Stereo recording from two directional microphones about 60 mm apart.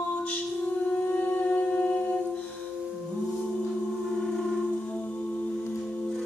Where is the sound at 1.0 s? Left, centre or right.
Left.